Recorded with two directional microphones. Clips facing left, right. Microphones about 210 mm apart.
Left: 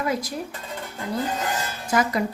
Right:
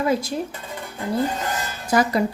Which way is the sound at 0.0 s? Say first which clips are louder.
Right 4 dB; 25° right (ahead or behind).